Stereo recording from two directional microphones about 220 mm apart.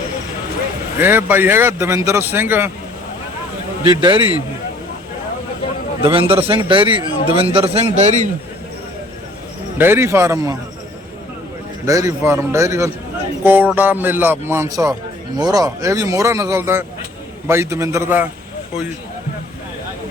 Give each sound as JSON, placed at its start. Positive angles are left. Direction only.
{"t": 0.9, "sound": "a man's voice", "side_deg": -10}
{"t": 3.8, "sound": "a man's voice", "side_deg": -20}
{"t": 6.1, "sound": "a man's voice", "side_deg": -25}
{"t": 9.7, "sound": "a man's voice", "side_deg": -10}
{"t": 11.9, "sound": "a man's voice", "side_deg": -15}